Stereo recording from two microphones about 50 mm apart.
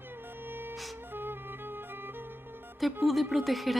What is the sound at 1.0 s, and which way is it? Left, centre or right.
Music, right.